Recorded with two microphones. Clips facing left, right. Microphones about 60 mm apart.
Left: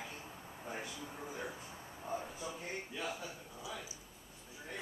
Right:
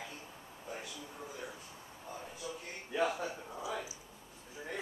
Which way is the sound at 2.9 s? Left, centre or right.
Right.